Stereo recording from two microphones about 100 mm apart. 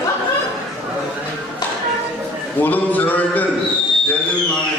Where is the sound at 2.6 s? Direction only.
15° left (ahead or behind).